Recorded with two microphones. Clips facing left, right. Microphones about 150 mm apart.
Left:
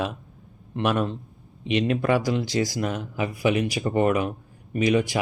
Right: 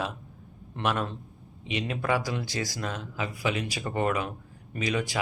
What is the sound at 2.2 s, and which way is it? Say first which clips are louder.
Speech: left 8 dB; 20° left (ahead or behind).